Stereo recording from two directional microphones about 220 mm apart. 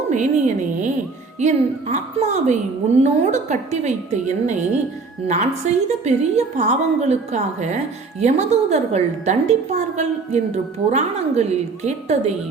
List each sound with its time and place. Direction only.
0.1 s a woman's voice: 35° right (ahead or behind)